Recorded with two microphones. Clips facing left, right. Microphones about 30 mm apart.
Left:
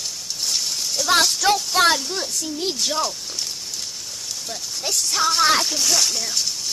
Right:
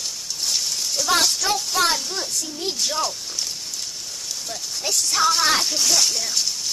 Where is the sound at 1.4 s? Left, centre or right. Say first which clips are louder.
Left 4 dB; left.